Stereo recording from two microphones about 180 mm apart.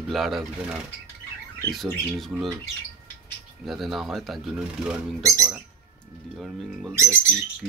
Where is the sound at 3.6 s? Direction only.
Centre (ahead or behind).